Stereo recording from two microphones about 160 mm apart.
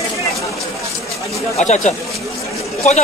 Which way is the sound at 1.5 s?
45° left (ahead or behind).